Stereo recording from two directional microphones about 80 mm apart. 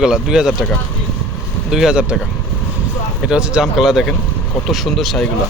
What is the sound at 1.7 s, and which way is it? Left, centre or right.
Speech, centre.